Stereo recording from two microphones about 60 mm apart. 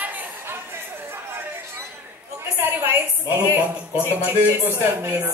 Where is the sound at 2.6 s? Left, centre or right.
Right.